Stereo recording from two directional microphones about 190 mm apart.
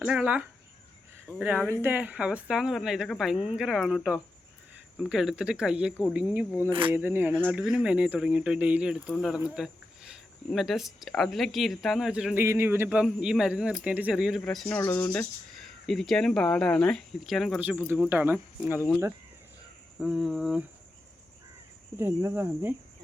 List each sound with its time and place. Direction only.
0.0 s speech: 5° right (ahead or behind)
6.7 s speech: 25° right (ahead or behind)
6.9 s speech: 10° right (ahead or behind)
20.0 s speech: centre (ahead or behind)
21.9 s speech: 15° right (ahead or behind)